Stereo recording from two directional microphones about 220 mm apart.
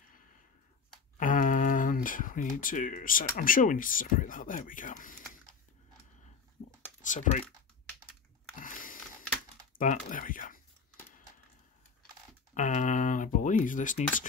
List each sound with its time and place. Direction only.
1.1 s a sound: 35° left (ahead or behind)
3.3 s speech: 40° left (ahead or behind)
7.0 s speech: 35° left (ahead or behind)
8.5 s a sound: 40° left (ahead or behind)
9.8 s speech: 35° left (ahead or behind)
12.5 s speech: 35° left (ahead or behind)